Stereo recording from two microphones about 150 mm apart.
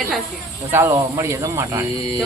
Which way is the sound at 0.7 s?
20° right (ahead or behind).